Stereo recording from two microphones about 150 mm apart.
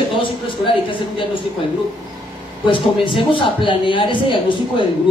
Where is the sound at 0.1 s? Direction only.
35° left (ahead or behind).